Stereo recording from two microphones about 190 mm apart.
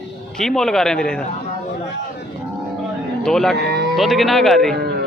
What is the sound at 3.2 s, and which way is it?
Speech, centre (ahead or behind).